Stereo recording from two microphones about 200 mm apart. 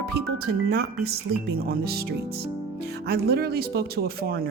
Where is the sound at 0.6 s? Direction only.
50° right (ahead or behind).